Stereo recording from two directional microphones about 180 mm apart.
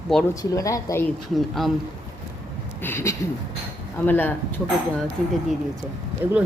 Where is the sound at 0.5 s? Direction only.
15° left (ahead or behind).